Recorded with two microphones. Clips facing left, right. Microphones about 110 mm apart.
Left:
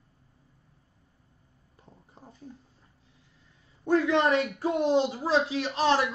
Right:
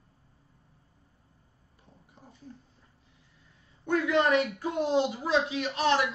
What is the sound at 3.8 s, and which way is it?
A woman's voice, 30° left (ahead or behind).